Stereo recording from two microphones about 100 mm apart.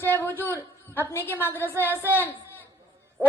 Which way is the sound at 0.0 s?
20° left (ahead or behind).